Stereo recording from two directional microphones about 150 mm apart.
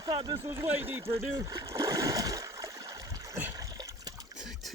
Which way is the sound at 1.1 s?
20° right (ahead or behind).